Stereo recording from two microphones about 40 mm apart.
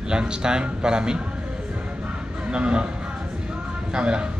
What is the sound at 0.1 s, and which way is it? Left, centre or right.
Speech, right.